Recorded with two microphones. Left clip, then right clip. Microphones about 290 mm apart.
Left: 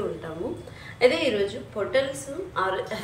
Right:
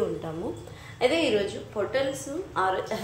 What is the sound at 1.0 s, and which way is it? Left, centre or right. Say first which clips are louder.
A woman's voice: left 2 dB; right.